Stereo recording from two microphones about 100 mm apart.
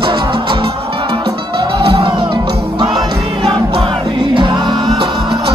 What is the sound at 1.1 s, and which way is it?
Music, 45° right (ahead or behind).